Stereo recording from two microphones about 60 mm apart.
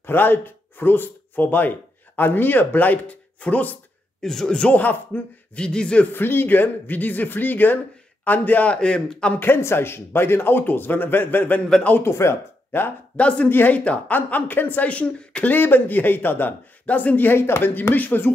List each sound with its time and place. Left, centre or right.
0.0 s speech: left
4.2 s speech: centre; by 5.2 s left
5.6 s speech: centre
6.1 s speech: left
8.7 s speech: centre
9.4 s speech: left
12.0 s speech: left
13.1 s speech: left
13.5 s speech: left
15.5 s speech: left
17.4 s speech: left